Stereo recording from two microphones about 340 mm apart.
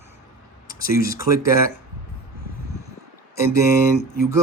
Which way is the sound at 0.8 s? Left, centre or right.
Left.